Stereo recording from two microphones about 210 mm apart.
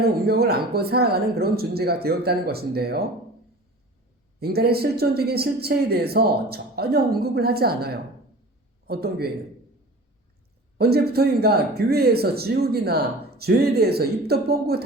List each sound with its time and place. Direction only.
0.0 s speech: 45° right (ahead or behind)
4.4 s speech: 50° right (ahead or behind)
10.8 s speech: 50° right (ahead or behind)